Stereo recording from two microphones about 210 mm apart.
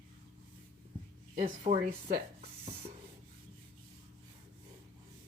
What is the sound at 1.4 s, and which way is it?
Speech, 35° right (ahead or behind).